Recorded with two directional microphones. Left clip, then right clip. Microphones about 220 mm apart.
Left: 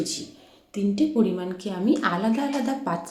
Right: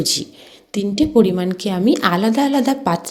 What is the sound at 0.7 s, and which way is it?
A woman's voice, 40° right (ahead or behind).